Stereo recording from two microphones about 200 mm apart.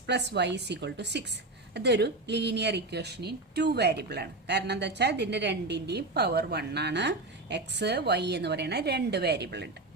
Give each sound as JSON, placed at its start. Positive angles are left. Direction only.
{"t": 0.1, "sound": "speech", "side_deg": -60}